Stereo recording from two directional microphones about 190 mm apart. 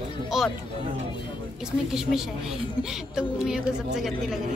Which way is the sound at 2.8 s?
5° right (ahead or behind).